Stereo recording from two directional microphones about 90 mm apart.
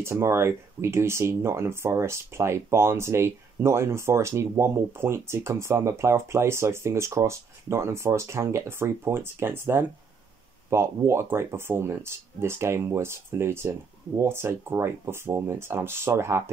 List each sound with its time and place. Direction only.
0.0 s speech: 30° right (ahead or behind)